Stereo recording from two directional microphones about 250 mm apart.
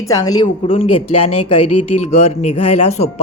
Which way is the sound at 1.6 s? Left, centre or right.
Left.